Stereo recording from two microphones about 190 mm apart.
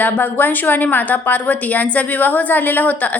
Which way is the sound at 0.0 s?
10° left (ahead or behind).